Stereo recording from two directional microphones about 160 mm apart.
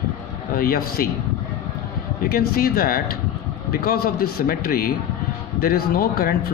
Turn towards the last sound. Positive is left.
turn(degrees=70)  # may be behind; listen again after turning